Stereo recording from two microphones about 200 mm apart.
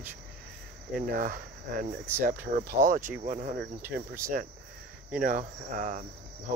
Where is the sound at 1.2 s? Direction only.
45° right (ahead or behind).